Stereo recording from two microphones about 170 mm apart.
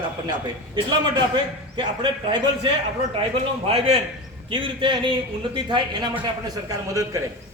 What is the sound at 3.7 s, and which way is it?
A man's voice, 35° right (ahead or behind).